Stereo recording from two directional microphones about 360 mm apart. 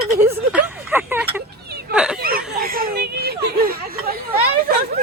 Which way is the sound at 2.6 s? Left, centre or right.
Right.